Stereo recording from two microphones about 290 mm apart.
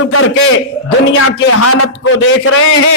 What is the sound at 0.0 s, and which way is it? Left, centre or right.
A man's voice, left.